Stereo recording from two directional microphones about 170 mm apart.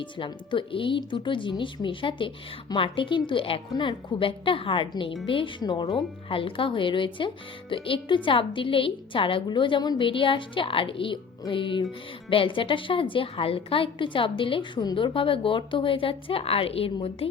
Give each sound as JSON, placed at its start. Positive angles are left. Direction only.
{"t": 0.0, "sound": "a woman's voice", "side_deg": 30}